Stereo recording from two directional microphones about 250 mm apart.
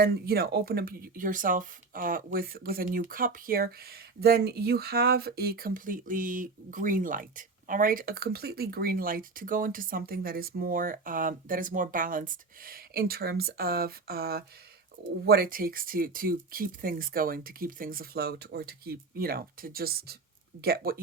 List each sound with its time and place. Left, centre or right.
0.0 s speech: right